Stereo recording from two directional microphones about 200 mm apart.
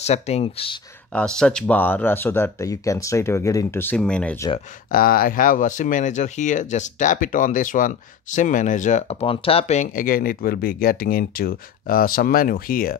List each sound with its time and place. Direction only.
0.0 s speech: 30° left (ahead or behind)
1.1 s speech: 5° left (ahead or behind)
4.9 s speech: 45° left (ahead or behind)